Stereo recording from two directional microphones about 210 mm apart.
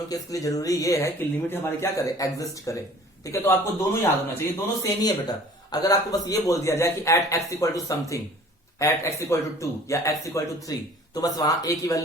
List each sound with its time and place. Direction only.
0.1 s a man's voice: 15° left (ahead or behind)